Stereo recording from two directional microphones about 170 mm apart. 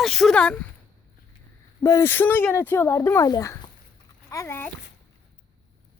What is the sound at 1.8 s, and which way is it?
A child's voice, 15° left (ahead or behind).